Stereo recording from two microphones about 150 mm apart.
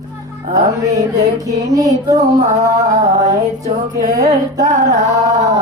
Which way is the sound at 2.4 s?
50° right (ahead or behind).